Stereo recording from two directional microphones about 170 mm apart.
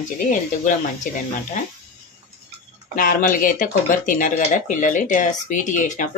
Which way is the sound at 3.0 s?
50° left (ahead or behind).